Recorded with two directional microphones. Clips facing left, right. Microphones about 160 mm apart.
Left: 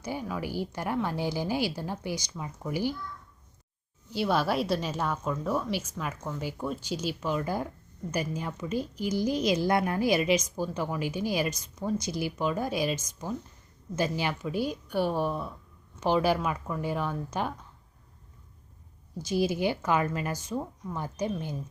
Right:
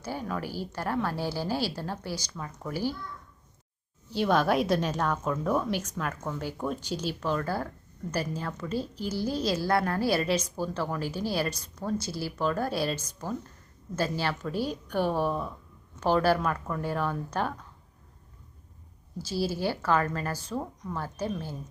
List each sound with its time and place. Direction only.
0.0 s a woman's voice: 15° left (ahead or behind)
4.1 s a woman's voice: 5° left (ahead or behind)
19.3 s a woman's voice: 15° left (ahead or behind)